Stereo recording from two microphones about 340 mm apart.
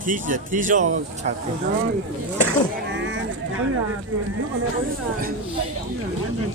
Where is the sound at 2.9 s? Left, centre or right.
Right.